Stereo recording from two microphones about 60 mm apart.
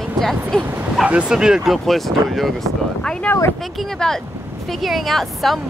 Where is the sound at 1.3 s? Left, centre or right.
Centre.